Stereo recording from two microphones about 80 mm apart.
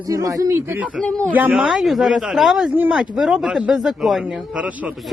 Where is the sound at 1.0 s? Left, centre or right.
Centre.